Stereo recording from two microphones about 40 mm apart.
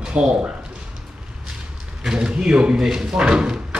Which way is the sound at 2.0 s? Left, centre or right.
Centre.